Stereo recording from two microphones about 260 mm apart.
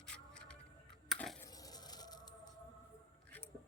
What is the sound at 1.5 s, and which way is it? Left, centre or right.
Music, centre.